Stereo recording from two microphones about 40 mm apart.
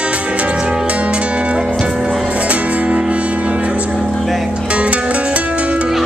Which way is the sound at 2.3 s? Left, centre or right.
Right.